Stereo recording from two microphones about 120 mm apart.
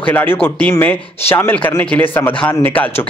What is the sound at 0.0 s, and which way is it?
Speech, 15° left (ahead or behind).